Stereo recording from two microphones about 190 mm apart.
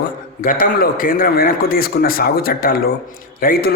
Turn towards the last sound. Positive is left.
turn(degrees=50)  # may be behind; listen again after turning